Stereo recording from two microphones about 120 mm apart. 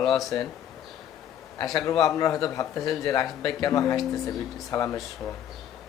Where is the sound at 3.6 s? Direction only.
30° left (ahead or behind).